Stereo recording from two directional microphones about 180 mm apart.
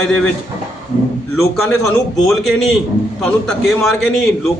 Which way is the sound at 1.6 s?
Centre (ahead or behind).